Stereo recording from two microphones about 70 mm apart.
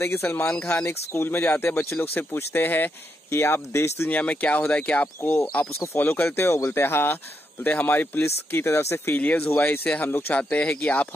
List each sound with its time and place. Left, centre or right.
0.0 s speech: left
4.1 s speech: left
5.2 s speech: left